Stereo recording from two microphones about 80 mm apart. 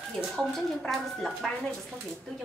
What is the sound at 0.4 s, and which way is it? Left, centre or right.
A woman's voice, centre.